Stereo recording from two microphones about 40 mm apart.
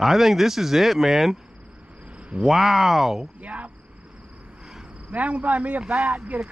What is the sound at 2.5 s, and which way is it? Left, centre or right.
Speech, centre.